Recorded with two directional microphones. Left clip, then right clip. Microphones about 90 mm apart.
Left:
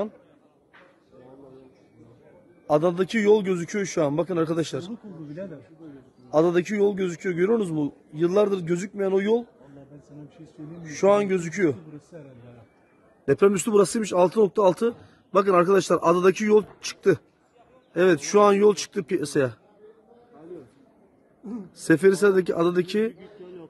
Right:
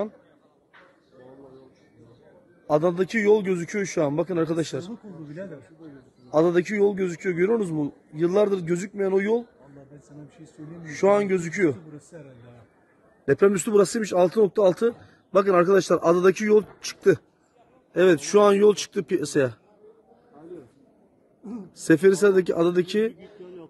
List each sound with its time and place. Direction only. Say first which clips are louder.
2.6 s speech: even; 20° right (ahead or behind)
6.3 s a man's voice: even; 30° right (ahead or behind)
10.8 s a man's voice: even; 35° right (ahead or behind)
13.2 s speech: even; 20° right (ahead or behind)
21.7 s speech: right 1 dB; 25° right (ahead or behind)